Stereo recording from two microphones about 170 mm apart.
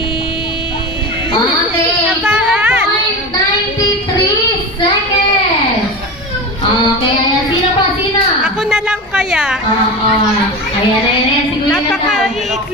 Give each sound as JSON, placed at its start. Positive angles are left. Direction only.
{"t": 2.2, "sound": "child singing", "side_deg": -5}
{"t": 8.6, "sound": "a woman's voice", "side_deg": -5}
{"t": 11.7, "sound": "a woman's voice", "side_deg": 0}